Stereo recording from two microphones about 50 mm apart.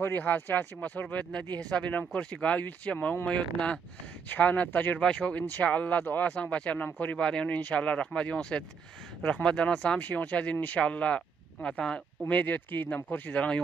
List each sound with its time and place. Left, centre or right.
0.5 s speech: left
1.1 s speech: left
5.0 s speech: left
7.2 s speech: centre
7.4 s speech: left
9.9 s speech: left
12.3 s speech: left
13.3 s speech: left